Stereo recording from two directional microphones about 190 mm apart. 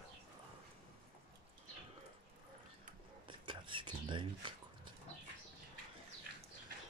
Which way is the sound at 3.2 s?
25° right (ahead or behind).